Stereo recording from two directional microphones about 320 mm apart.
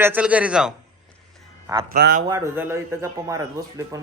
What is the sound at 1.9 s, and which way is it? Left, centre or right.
Speech, right.